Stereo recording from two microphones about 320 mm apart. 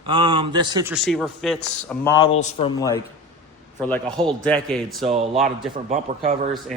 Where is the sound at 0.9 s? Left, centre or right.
Centre.